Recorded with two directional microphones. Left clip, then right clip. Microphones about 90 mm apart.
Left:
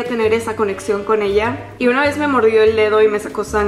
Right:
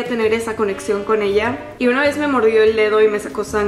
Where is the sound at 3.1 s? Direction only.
5° left (ahead or behind).